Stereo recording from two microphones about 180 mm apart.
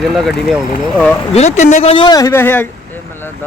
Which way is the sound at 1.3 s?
40° left (ahead or behind).